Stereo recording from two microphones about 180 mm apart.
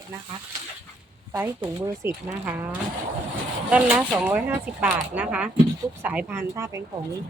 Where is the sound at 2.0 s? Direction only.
15° right (ahead or behind).